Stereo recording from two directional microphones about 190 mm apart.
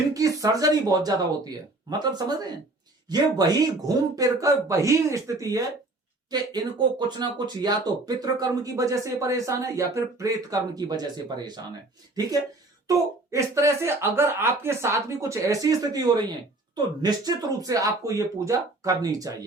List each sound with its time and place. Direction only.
0.1 s speech: 15° right (ahead or behind)
12.9 s speech: 15° right (ahead or behind)